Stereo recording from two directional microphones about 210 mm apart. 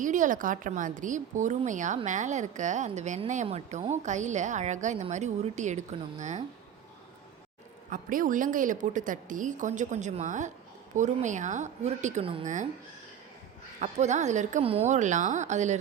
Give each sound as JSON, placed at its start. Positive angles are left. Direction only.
{"t": 0.0, "sound": "a woman's voice", "side_deg": -35}
{"t": 7.9, "sound": "a woman's voice", "side_deg": -40}
{"t": 13.8, "sound": "a woman's voice", "side_deg": -35}